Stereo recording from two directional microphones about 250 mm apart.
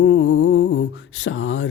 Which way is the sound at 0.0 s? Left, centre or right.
Left.